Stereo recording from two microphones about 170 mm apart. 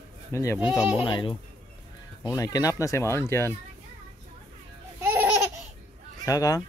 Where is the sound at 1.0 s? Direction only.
30° left (ahead or behind).